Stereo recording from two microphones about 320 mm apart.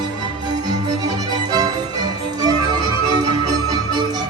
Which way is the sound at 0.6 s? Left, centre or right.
Centre.